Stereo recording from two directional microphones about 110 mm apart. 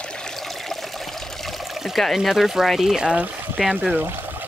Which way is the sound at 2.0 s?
Centre (ahead or behind).